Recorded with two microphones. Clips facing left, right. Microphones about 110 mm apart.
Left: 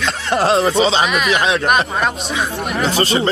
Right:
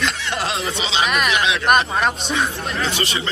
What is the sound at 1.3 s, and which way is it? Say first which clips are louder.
Speech: left 4 dB; 40° left (ahead or behind).